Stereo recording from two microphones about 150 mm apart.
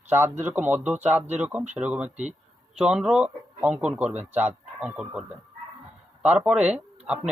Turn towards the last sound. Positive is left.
turn(degrees=-5)  # may be behind; listen again after turning